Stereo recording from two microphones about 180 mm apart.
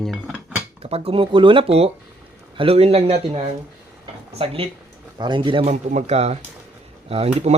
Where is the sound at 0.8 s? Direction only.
35° right (ahead or behind).